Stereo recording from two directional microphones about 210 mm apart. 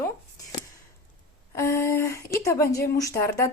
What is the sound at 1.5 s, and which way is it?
A woman's voice, 10° left (ahead or behind).